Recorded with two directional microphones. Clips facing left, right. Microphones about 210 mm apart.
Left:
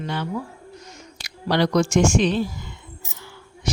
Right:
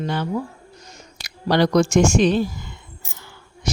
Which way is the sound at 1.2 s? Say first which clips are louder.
Right 3 dB; 45° right (ahead or behind).